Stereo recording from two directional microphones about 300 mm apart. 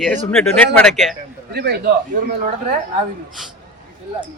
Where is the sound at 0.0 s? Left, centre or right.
Centre.